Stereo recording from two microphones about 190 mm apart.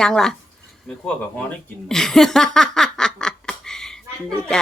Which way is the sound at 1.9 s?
Centre (ahead or behind).